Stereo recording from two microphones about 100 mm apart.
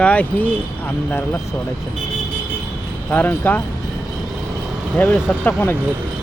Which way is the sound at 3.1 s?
20° left (ahead or behind).